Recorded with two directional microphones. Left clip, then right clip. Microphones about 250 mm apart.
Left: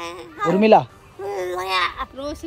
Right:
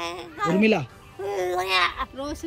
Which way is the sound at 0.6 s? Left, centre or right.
Left.